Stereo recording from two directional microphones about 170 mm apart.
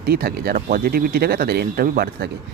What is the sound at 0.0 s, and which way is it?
Speech, 65° right (ahead or behind).